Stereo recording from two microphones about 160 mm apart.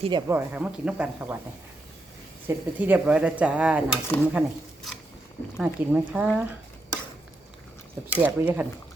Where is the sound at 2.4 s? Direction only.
10° right (ahead or behind).